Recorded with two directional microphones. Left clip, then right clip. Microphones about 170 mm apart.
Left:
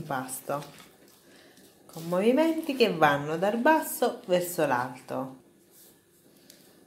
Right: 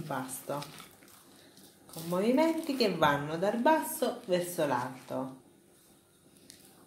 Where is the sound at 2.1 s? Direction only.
25° left (ahead or behind).